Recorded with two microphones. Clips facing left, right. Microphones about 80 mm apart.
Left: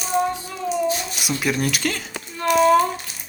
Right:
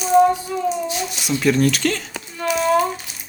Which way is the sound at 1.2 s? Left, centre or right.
Centre.